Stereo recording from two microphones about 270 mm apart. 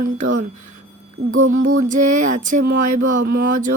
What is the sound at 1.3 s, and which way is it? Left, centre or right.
Speech, right.